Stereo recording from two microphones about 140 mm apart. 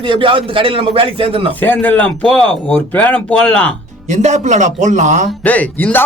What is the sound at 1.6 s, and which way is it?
Speech, 10° left (ahead or behind).